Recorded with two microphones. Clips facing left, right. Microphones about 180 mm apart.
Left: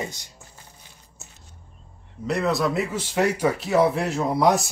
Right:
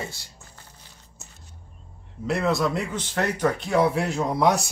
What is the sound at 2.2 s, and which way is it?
A man's voice, centre (ahead or behind).